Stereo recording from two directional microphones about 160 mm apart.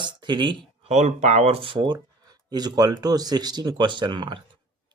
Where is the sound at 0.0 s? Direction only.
30° right (ahead or behind).